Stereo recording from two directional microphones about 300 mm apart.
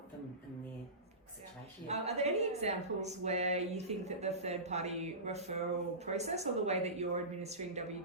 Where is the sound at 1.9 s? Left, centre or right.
Right.